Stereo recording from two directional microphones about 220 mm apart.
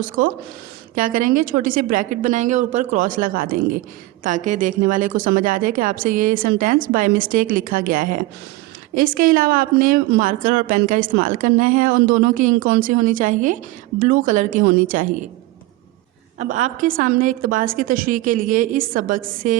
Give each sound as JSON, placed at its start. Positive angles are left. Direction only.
{"t": 0.0, "sound": "a woman's voice", "side_deg": -35}
{"t": 16.4, "sound": "a woman's voice", "side_deg": -30}